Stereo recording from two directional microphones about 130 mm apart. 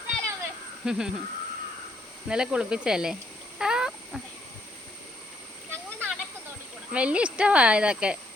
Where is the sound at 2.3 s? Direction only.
5° right (ahead or behind).